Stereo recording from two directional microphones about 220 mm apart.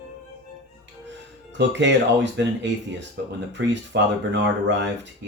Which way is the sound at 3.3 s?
50° right (ahead or behind).